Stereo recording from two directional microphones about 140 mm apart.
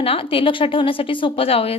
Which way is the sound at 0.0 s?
40° left (ahead or behind).